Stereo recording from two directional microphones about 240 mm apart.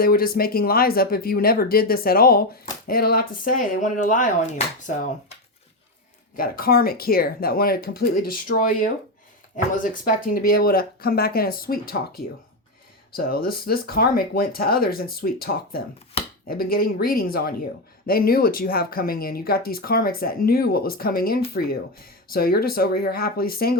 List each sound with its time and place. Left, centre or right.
0.0 s speech: left
6.3 s speech: left
16.2 s chopping: left
16.5 s speech: left